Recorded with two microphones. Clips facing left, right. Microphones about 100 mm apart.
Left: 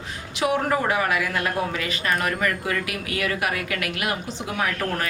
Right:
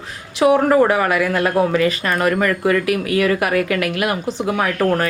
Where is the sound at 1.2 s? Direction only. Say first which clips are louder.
Right 8 dB; 75° right (ahead or behind).